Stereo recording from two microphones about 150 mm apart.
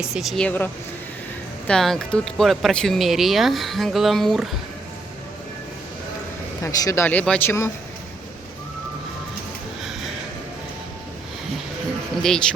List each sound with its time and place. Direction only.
0.0 s speech: centre (ahead or behind)
6.6 s speech: 25° left (ahead or behind)
12.2 s speech: 5° left (ahead or behind)